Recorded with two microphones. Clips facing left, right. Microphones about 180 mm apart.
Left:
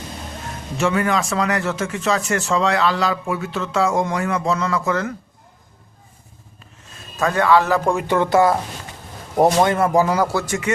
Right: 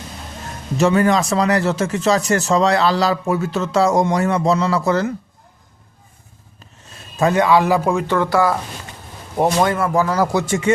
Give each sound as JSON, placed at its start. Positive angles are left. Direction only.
{"t": 0.8, "sound": "speech", "side_deg": -35}
{"t": 7.2, "sound": "a man's voice", "side_deg": -20}
{"t": 8.0, "sound": "speech", "side_deg": 20}
{"t": 9.6, "sound": "speech", "side_deg": 25}
{"t": 10.2, "sound": "speech", "side_deg": -25}